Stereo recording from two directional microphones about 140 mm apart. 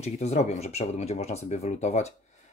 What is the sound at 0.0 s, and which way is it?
Speech, 50° left (ahead or behind).